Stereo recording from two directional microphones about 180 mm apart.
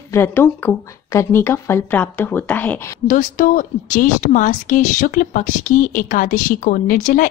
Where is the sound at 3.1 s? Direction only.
45° left (ahead or behind).